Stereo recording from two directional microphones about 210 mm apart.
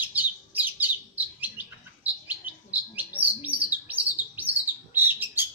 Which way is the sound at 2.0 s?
10° right (ahead or behind).